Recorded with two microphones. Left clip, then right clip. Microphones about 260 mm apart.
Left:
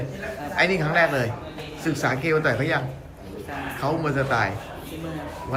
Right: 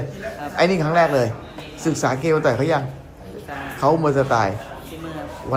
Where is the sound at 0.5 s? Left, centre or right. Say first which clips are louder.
Right 3 dB; centre.